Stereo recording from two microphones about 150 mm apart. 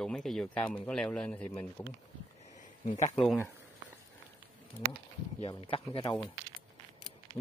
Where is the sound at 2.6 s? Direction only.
55° left (ahead or behind).